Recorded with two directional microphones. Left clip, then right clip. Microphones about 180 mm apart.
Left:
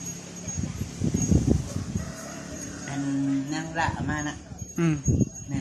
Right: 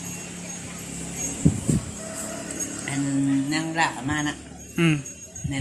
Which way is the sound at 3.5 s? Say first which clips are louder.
Right 4 dB; 20° right (ahead or behind).